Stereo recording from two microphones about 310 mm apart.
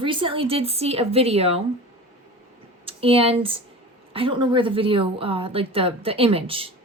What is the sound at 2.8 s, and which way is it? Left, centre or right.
A woman's voice, centre.